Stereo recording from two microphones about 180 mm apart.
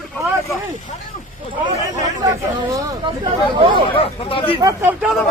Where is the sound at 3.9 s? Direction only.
30° left (ahead or behind).